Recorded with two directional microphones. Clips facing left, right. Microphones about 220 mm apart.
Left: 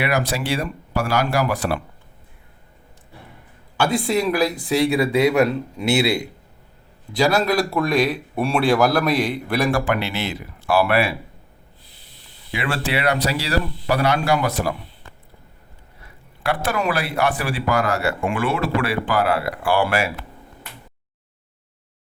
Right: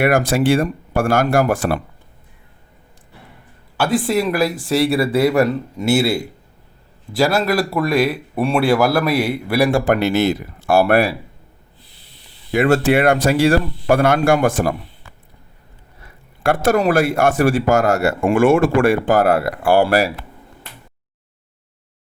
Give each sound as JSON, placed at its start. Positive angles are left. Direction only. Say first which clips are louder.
{"t": 0.0, "sound": "speech", "louder": "right 7 dB", "side_deg": -50}
{"t": 3.8, "sound": "speech", "louder": "right 2 dB", "side_deg": -5}
{"t": 9.8, "sound": "speech", "louder": "right 8 dB", "side_deg": -45}
{"t": 12.5, "sound": "speech", "louder": "right 11 dB", "side_deg": -45}
{"t": 16.4, "sound": "speech", "louder": "right 7 dB", "side_deg": -45}